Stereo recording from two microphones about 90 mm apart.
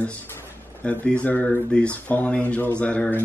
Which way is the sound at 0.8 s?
15° left (ahead or behind).